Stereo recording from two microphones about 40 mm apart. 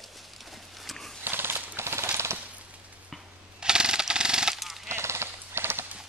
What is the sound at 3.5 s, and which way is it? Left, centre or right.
Jackhammer, centre.